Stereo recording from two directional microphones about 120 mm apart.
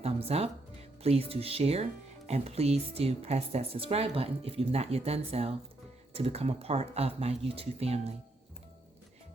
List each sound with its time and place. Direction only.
0.0 s music: 60° right (ahead or behind)
1.0 s speech: 55° right (ahead or behind)